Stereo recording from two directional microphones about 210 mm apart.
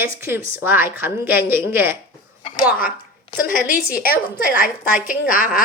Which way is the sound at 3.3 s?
40° left (ahead or behind).